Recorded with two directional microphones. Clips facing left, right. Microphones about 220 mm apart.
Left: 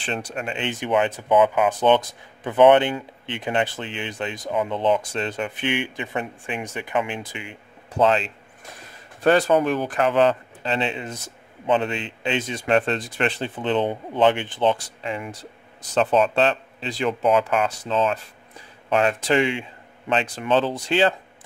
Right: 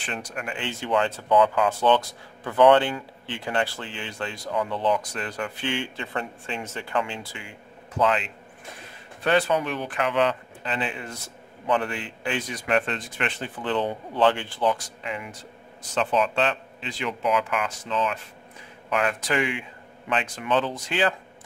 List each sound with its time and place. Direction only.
0.0 s speech: 30° left (ahead or behind)
9.2 s speech: 40° left (ahead or behind)
13.6 s speech: 20° left (ahead or behind)